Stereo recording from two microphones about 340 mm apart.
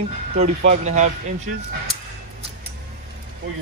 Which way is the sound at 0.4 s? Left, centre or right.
Centre.